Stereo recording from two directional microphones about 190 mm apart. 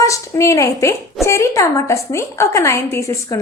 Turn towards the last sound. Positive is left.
turn(degrees=15)  # may be behind; listen again after turning